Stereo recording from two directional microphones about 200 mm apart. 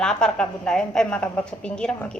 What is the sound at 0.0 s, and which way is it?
A woman's voice, 5° left (ahead or behind).